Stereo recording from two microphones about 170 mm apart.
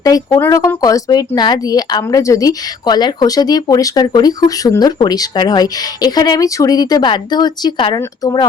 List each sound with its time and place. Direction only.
0.0 s speech: 20° left (ahead or behind)